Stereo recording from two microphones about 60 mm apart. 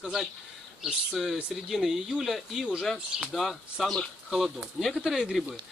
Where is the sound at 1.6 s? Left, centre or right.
Centre.